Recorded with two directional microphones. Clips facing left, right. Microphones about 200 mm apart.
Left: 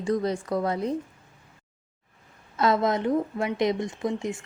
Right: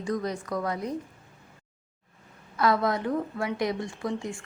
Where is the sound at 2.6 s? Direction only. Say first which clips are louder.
Left 2 dB; 20° left (ahead or behind).